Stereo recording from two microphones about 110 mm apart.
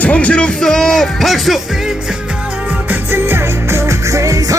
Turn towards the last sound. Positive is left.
turn(degrees=-30)  # may be behind; listen again after turning